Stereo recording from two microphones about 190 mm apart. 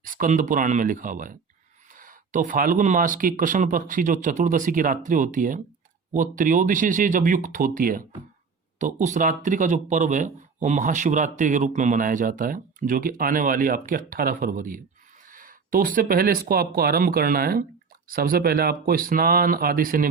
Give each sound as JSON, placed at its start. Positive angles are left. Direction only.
{"t": 0.0, "sound": "speech", "side_deg": -45}